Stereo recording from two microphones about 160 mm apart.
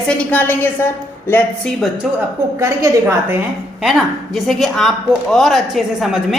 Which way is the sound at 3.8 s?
Centre (ahead or behind).